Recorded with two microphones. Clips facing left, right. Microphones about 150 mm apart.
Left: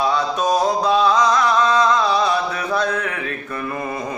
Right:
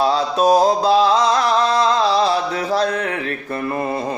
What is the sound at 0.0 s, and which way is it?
Mantra, 35° right (ahead or behind).